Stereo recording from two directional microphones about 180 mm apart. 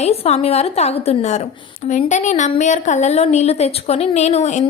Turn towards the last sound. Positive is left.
turn(degrees=40)  # may be behind; listen again after turning